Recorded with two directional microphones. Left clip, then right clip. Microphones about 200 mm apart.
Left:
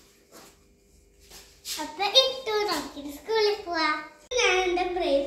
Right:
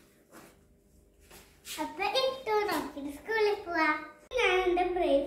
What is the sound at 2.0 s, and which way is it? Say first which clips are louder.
Child singing: left 8 dB; 5° right (ahead or behind).